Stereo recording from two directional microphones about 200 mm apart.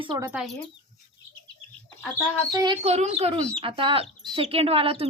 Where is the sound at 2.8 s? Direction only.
30° right (ahead or behind).